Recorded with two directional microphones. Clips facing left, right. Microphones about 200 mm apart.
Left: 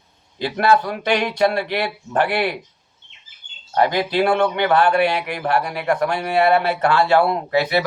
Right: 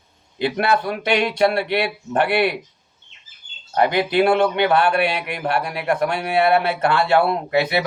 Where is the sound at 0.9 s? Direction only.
20° right (ahead or behind).